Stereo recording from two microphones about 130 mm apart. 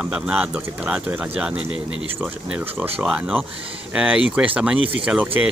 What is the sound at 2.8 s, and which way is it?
Speech, 10° right (ahead or behind).